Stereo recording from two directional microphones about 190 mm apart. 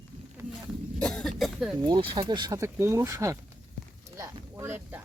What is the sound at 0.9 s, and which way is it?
Cough, 5° left (ahead or behind).